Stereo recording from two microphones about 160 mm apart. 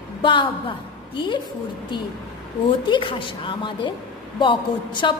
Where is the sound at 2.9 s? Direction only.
30° left (ahead or behind).